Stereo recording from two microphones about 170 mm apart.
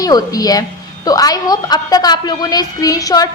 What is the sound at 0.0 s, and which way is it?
A woman's voice, 20° left (ahead or behind).